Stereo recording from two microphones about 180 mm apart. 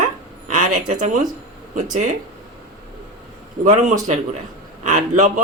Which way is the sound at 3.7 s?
40° right (ahead or behind).